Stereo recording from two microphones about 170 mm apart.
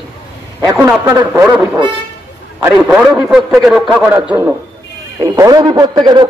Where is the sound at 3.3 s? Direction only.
Centre (ahead or behind).